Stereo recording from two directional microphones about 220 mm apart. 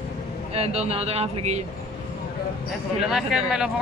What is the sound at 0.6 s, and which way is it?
Speech, 30° right (ahead or behind).